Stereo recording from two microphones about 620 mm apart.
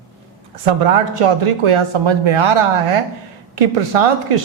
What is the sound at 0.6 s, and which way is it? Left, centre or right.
A man's voice, right.